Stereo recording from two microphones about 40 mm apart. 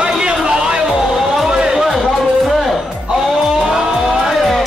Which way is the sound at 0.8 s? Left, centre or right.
Centre.